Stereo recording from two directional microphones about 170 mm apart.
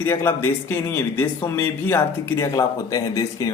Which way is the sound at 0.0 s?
15° left (ahead or behind).